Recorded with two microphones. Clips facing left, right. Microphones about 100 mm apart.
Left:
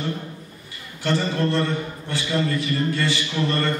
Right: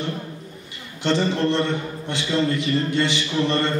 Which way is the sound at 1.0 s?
20° right (ahead or behind).